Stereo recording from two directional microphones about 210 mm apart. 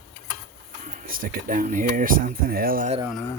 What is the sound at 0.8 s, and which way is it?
Speech, 40° right (ahead or behind).